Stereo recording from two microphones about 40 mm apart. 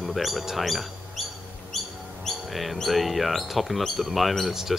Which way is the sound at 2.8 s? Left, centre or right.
Centre.